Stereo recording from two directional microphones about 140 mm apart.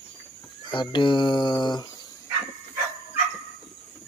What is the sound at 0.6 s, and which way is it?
Speech, 35° left (ahead or behind).